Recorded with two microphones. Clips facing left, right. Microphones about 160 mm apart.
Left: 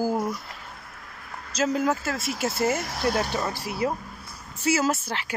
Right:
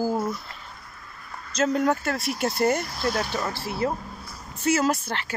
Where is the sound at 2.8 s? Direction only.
70° left (ahead or behind).